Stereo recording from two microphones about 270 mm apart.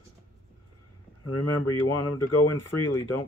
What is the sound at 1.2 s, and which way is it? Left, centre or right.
Speech, left.